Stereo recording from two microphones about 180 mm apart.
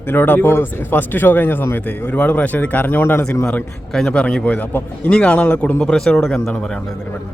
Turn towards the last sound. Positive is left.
turn(degrees=5)  # may be behind; listen again after turning